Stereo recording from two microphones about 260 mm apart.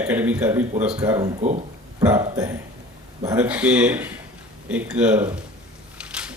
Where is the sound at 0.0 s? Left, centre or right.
Centre.